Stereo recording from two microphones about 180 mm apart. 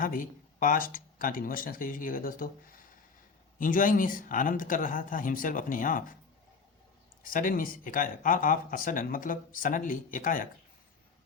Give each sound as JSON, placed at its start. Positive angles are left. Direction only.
{"t": 0.0, "sound": "speech", "side_deg": 50}
{"t": 7.3, "sound": "speech", "side_deg": 50}